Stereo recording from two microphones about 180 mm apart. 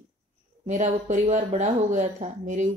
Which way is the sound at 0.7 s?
40° right (ahead or behind).